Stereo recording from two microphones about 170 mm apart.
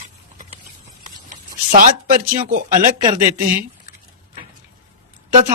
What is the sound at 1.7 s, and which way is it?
Speech, 50° right (ahead or behind).